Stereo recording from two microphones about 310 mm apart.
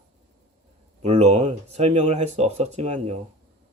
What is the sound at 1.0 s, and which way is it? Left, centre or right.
Speech, centre.